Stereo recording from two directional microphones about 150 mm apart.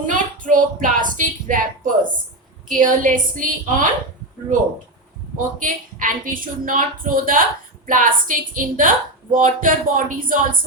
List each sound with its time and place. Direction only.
0.0 s a woman's voice: 60° right (ahead or behind)
5.4 s a woman's voice: 65° right (ahead or behind)